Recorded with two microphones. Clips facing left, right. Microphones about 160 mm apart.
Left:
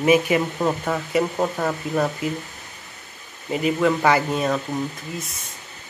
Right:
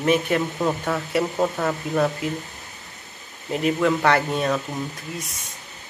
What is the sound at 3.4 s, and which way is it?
Speech, centre (ahead or behind).